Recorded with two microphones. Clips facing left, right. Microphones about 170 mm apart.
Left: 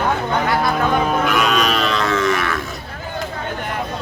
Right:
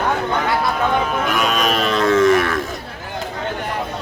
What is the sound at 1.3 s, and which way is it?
Cattle, 45° right (ahead or behind).